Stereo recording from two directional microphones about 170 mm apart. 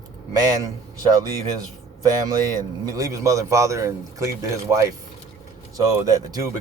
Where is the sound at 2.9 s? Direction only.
20° right (ahead or behind).